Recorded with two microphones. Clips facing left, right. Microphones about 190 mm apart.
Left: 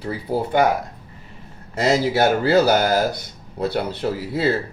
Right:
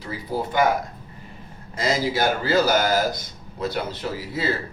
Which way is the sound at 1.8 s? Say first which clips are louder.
Left 5 dB; 65° left (ahead or behind).